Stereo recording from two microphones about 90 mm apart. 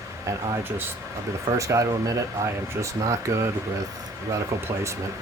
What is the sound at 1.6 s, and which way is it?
Speech, 35° right (ahead or behind).